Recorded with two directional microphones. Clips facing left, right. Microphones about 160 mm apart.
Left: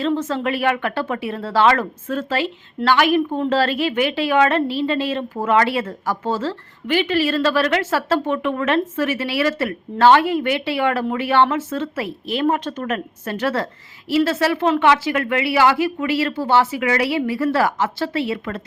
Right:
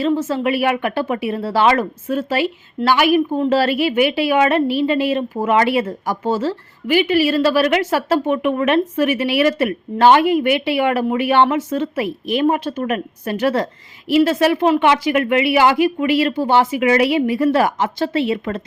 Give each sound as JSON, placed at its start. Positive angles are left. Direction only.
{"t": 0.0, "sound": "speech", "side_deg": -10}